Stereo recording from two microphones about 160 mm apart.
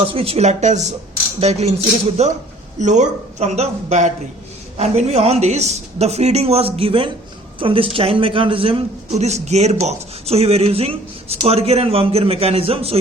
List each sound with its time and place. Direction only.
0.0 s a man's voice: 35° right (ahead or behind)